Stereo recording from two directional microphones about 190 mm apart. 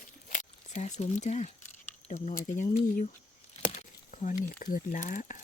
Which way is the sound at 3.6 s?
40° left (ahead or behind).